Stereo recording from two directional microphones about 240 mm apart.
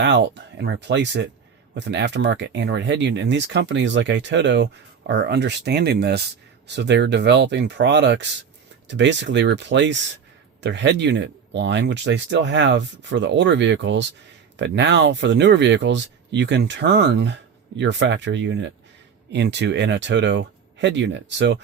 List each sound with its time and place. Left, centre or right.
0.0 s speech: right